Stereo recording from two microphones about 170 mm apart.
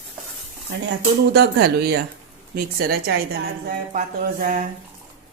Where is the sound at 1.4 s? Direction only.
65° right (ahead or behind); by 4.6 s 50° right (ahead or behind).